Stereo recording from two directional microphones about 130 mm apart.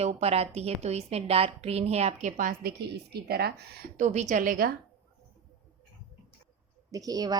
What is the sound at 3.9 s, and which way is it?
Speech, 60° right (ahead or behind).